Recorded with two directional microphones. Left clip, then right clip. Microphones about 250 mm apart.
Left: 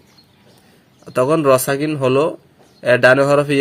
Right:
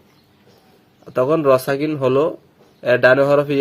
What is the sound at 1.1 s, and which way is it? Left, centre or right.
Speech, centre.